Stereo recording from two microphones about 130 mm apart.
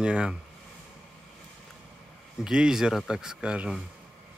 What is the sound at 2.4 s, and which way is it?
Speech, 5° right (ahead or behind).